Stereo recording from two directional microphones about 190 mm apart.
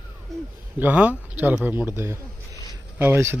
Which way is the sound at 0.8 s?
10° right (ahead or behind).